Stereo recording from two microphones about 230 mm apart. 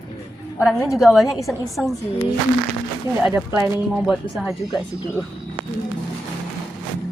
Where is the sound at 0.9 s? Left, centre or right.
Centre.